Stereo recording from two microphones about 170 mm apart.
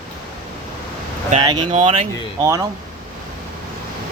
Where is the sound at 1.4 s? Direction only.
30° right (ahead or behind).